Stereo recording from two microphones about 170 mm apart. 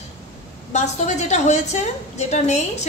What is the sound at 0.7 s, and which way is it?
A woman's voice, 40° left (ahead or behind).